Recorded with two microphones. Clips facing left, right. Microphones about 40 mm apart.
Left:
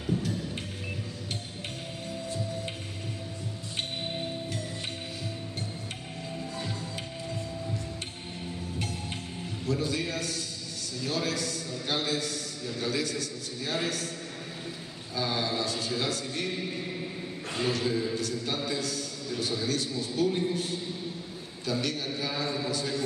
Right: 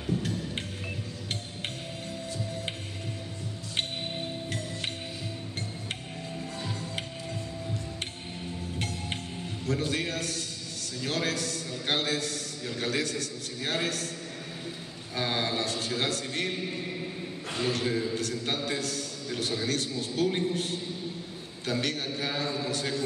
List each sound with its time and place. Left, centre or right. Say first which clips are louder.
8.7 s music: right 2 dB; right
11.1 s a man's voice: right 1 dB; right
15.1 s a man's voice: even; right
17.7 s a man's voice: even; right
22.7 s a man's voice: even; right